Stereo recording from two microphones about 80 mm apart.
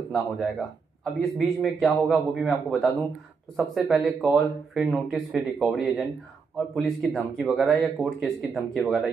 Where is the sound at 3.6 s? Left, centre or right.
Centre.